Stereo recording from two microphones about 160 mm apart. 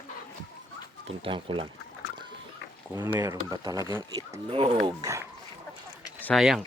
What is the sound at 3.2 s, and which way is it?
Speech, 25° right (ahead or behind).